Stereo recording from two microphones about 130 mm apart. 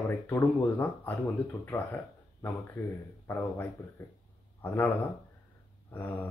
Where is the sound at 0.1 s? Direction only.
15° left (ahead or behind).